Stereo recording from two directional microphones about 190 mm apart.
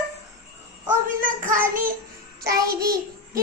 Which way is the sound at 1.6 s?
45° right (ahead or behind).